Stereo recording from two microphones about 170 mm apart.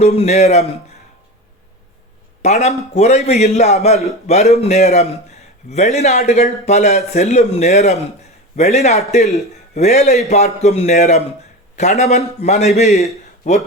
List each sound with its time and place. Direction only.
0.0 s a man's voice: 40° left (ahead or behind)
2.4 s a man's voice: 40° left (ahead or behind)